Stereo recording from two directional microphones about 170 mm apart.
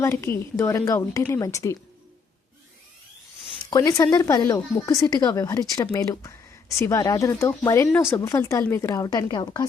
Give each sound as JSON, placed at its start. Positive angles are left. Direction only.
{"t": 0.0, "sound": "a woman's voice", "side_deg": 15}
{"t": 3.7, "sound": "a woman's voice", "side_deg": 20}